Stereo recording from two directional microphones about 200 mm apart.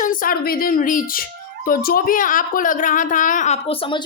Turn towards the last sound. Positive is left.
turn(degrees=25)  # may be behind; listen again after turning